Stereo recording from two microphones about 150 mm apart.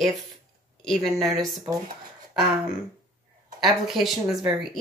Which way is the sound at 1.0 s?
25° right (ahead or behind).